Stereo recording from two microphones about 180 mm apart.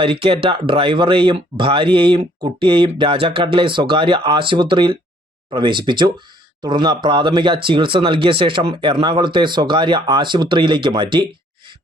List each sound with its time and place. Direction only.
0.0 s speech: 30° right (ahead or behind)